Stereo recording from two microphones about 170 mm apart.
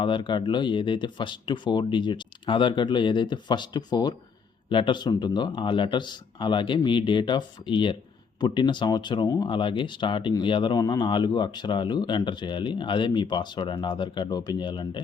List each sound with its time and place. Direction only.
0.0 s speech: 30° left (ahead or behind)